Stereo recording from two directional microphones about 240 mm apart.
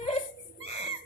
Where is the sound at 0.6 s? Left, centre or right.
Left.